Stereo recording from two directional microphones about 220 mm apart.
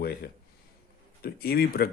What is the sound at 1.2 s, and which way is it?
Speech, 45° left (ahead or behind).